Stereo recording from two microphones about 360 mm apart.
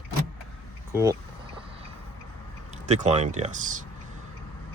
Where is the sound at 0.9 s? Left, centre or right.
Centre.